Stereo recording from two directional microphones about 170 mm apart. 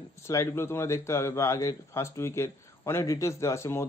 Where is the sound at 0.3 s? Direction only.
15° left (ahead or behind).